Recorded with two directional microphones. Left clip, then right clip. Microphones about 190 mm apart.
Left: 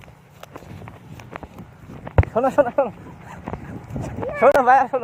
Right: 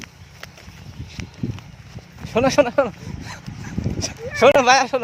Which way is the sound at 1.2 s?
55° left (ahead or behind).